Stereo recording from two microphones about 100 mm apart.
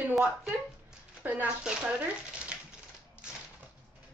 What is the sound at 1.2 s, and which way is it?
Speech, 15° right (ahead or behind).